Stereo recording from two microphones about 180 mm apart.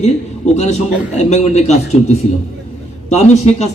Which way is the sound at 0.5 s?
35° left (ahead or behind).